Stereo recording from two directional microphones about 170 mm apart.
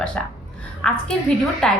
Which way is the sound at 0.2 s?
5° left (ahead or behind).